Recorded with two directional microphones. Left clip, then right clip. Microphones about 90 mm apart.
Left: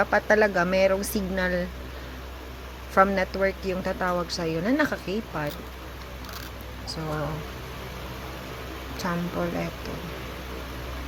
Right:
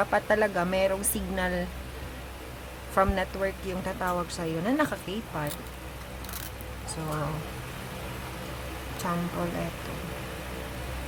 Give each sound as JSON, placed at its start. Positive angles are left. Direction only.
{"t": 0.0, "sound": "a woman's voice", "side_deg": 20}
{"t": 2.9, "sound": "a woman's voice", "side_deg": 20}
{"t": 6.8, "sound": "speech", "side_deg": 15}
{"t": 9.0, "sound": "a woman's voice", "side_deg": 20}